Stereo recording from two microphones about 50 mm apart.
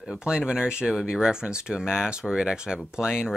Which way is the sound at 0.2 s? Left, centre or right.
Centre.